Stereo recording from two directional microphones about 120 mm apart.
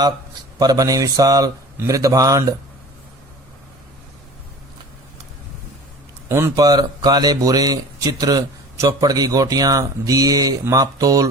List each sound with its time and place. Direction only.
0.6 s speech: 30° right (ahead or behind)
6.2 s speech: 25° right (ahead or behind)